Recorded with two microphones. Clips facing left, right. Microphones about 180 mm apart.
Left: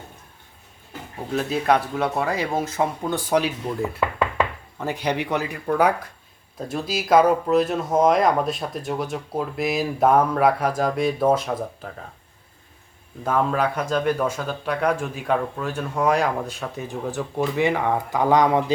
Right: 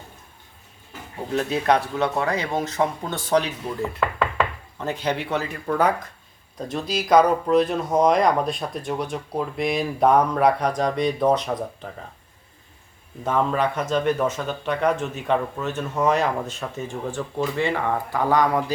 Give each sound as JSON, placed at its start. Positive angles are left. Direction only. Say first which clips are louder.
{"t": 1.4, "sound": "speech", "louder": "even", "side_deg": 5}
{"t": 13.2, "sound": "speech", "louder": "even", "side_deg": 0}
{"t": 16.1, "sound": "speech", "louder": "even", "side_deg": 10}